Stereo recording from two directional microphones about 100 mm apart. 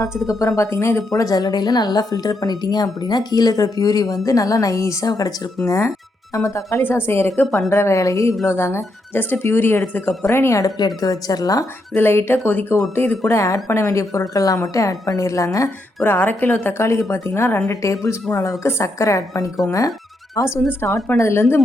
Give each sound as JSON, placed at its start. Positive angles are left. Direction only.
{"t": 0.3, "sound": "a woman's voice", "side_deg": 35}
{"t": 10.8, "sound": "a woman's voice", "side_deg": 40}
{"t": 11.9, "sound": "a woman's voice", "side_deg": 20}
{"t": 16.0, "sound": "a woman's voice", "side_deg": 20}
{"t": 20.7, "sound": "speech", "side_deg": 25}